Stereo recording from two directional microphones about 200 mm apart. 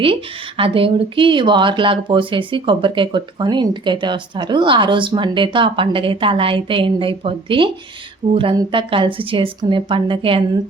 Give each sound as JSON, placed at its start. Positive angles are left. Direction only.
{"t": 0.0, "sound": "speech", "side_deg": -25}